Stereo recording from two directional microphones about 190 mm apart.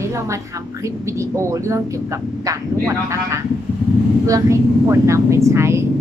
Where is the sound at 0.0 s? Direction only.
15° right (ahead or behind).